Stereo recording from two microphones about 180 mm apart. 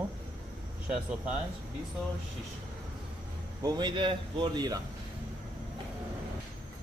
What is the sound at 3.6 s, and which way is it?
A man's voice, 25° right (ahead or behind).